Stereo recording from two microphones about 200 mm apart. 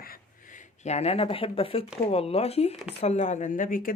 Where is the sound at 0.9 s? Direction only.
30° left (ahead or behind).